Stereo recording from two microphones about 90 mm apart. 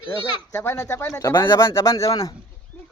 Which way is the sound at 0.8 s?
30° left (ahead or behind).